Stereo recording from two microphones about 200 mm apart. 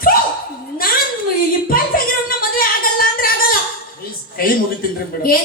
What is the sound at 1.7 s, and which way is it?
Music, 45° left (ahead or behind).